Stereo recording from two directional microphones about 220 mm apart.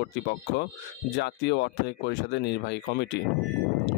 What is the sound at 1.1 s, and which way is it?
Speech, 50° left (ahead or behind).